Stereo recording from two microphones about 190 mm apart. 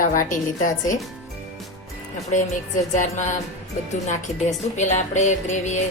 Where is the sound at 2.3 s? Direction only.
40° left (ahead or behind).